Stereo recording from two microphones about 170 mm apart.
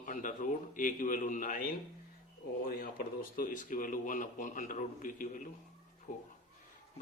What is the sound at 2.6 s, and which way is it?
Speech, 60° left (ahead or behind).